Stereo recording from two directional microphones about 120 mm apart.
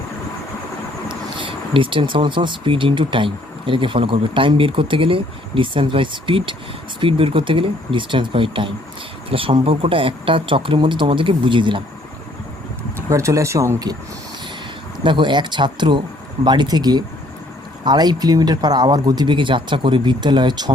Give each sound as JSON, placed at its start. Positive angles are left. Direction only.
{"t": 1.0, "sound": "speech", "side_deg": -45}
{"t": 13.1, "sound": "speech", "side_deg": -25}
{"t": 15.0, "sound": "speech", "side_deg": -40}